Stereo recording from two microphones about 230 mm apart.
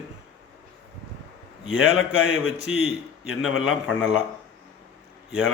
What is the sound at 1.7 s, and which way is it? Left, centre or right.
A man's voice, left.